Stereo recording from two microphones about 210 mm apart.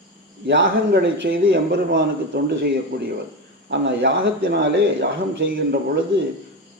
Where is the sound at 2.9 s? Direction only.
55° right (ahead or behind).